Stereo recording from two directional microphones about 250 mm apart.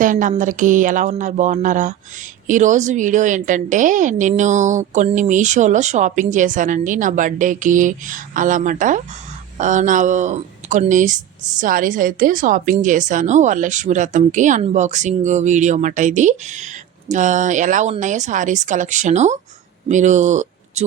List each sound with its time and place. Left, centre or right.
0.0 s a woman's voice: right